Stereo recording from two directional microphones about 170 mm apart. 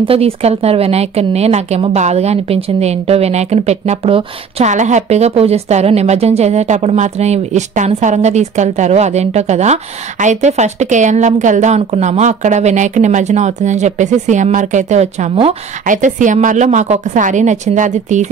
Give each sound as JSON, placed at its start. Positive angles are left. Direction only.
{"t": 0.0, "sound": "a woman's voice", "side_deg": -35}